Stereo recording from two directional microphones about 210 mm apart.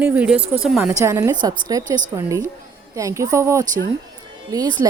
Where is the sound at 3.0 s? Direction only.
15° right (ahead or behind).